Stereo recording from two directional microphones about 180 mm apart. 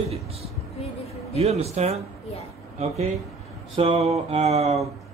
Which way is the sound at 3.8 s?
35° right (ahead or behind).